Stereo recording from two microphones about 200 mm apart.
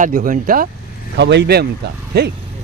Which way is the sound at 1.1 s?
60° right (ahead or behind).